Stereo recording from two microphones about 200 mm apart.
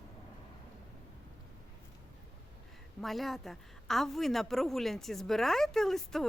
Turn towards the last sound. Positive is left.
turn(degrees=0)  # may be behind; listen again after turning